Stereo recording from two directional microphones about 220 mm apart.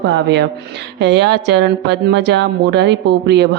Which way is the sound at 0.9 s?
50° right (ahead or behind).